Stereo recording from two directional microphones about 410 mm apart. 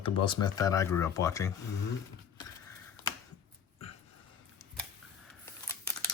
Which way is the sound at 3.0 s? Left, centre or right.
Centre.